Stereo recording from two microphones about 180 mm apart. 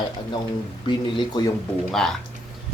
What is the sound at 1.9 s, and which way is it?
Speech, centre (ahead or behind).